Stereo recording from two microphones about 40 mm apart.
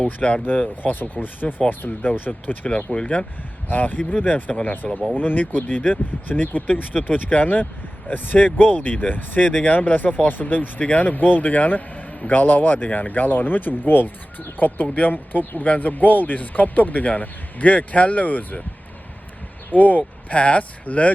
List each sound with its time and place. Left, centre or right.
0.0 s speech: left
0.4 s speech: left
6.9 s speech: left
19.7 s speech: left